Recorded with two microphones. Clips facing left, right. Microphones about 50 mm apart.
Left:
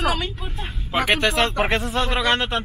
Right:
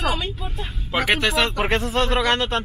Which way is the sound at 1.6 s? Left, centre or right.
Left.